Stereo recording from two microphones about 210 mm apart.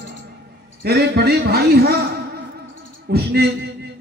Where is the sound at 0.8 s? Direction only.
50° right (ahead or behind).